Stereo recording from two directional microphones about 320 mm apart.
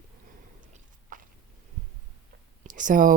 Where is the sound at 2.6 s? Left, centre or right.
Right.